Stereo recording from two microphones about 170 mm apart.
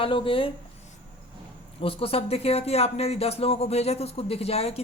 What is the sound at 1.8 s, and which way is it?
Speech, 35° left (ahead or behind).